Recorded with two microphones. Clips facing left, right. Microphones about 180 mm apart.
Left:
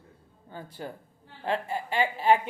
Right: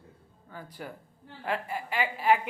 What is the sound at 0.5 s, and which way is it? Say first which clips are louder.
Speech: left 3 dB; 30° left (ahead or behind).